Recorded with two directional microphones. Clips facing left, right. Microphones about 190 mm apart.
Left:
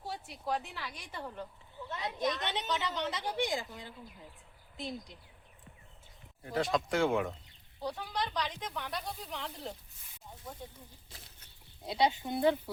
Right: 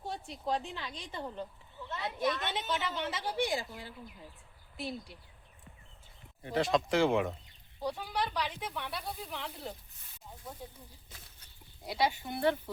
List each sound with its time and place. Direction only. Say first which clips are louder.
0.6 s a woman's voice: right 3 dB; 20° right (ahead or behind)
0.9 s a woman's voice: right 2 dB; 10° left (ahead or behind)
1.1 s speech: right 3 dB; 15° right (ahead or behind)
1.9 s a woman's voice: right 1 dB; 15° left (ahead or behind)
3.5 s speech: right 1 dB; 15° right (ahead or behind)
4.8 s speech: right 1 dB; 20° left (ahead or behind)
6.4 s speech: right 2 dB; centre (ahead or behind)
11.9 s speech: left 2 dB; 20° left (ahead or behind)